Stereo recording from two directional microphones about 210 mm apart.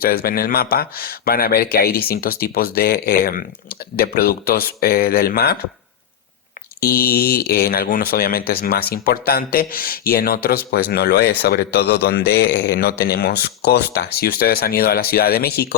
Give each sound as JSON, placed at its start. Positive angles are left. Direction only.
{"t": 0.0, "sound": "speech", "side_deg": 45}
{"t": 6.7, "sound": "speech", "side_deg": 45}